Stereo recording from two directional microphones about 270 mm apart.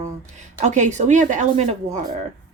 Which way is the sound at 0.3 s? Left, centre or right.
Right.